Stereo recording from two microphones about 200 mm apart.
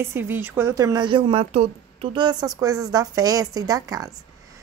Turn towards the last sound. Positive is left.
turn(degrees=-20)  # may be behind; listen again after turning